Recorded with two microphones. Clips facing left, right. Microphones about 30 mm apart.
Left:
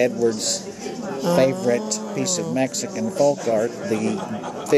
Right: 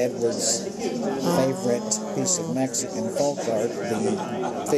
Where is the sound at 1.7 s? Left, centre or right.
Left.